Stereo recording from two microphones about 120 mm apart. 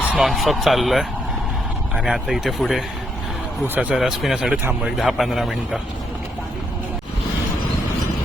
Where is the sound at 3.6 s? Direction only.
15° right (ahead or behind).